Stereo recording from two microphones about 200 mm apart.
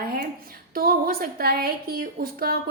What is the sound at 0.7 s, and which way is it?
A woman's voice, 50° right (ahead or behind).